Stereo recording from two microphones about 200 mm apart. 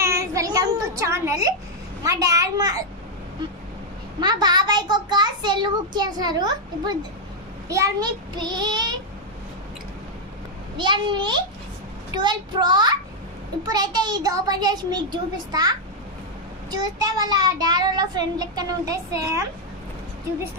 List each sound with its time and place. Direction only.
0.0 s a sound: 15° right (ahead or behind)
2.0 s a child's voice: 15° right (ahead or behind)
4.2 s a child's voice: 20° right (ahead or behind)
10.8 s a child's voice: 25° right (ahead or behind)
16.7 s a child's voice: 20° right (ahead or behind)